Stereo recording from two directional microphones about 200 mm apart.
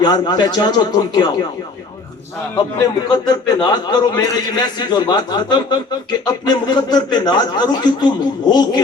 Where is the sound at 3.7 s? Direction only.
20° left (ahead or behind).